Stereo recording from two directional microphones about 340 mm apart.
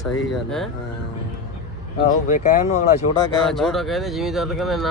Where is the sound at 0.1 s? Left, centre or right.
Centre.